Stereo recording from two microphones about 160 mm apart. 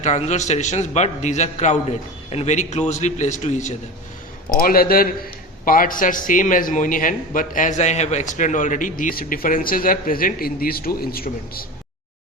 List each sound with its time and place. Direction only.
0.0 s a man's voice: 45° left (ahead or behind)
4.5 s a man's voice: 65° left (ahead or behind)